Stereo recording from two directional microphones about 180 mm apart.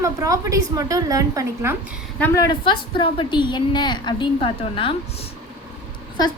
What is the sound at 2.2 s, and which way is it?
A woman's voice, 15° left (ahead or behind).